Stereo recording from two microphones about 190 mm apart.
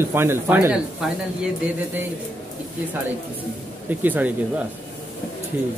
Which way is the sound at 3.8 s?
10° right (ahead or behind).